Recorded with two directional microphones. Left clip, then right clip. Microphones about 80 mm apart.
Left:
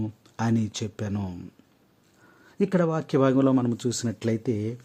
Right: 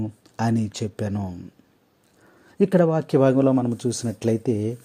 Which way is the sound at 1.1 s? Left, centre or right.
Centre.